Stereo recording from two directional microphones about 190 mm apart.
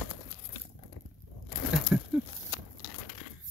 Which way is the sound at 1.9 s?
10° right (ahead or behind).